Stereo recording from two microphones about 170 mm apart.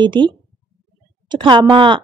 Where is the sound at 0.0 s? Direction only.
25° right (ahead or behind).